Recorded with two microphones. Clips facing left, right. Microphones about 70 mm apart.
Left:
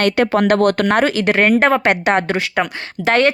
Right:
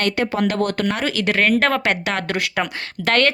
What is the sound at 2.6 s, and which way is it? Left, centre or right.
Speech, centre.